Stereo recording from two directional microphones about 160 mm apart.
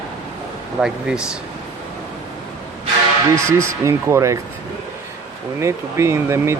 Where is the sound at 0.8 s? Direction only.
5° right (ahead or behind).